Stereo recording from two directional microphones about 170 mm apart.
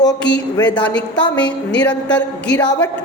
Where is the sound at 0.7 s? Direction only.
5° left (ahead or behind).